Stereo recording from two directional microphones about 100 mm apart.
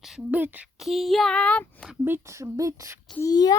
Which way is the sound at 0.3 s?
15° right (ahead or behind).